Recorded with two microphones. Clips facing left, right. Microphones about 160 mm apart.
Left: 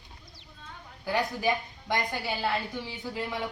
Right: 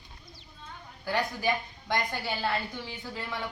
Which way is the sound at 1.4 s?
20° left (ahead or behind).